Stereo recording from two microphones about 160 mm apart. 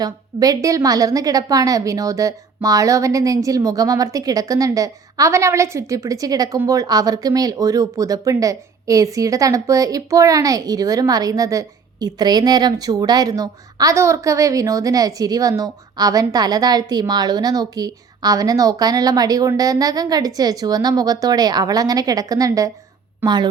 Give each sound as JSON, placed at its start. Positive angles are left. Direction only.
{"t": 0.0, "sound": "speech", "side_deg": -25}